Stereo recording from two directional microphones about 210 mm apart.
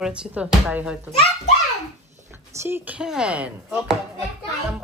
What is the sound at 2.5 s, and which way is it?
Speech, 10° right (ahead or behind).